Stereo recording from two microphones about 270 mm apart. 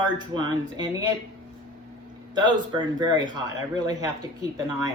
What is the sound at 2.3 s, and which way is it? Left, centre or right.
A man's voice, centre.